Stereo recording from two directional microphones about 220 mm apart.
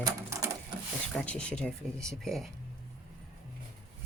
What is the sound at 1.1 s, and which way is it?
Speech, 5° left (ahead or behind).